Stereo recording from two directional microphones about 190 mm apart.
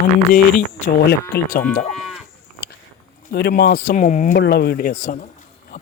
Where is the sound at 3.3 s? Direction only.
60° left (ahead or behind); by 4.4 s 40° left (ahead or behind).